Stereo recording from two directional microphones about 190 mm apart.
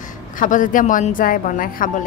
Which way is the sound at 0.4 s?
45° left (ahead or behind).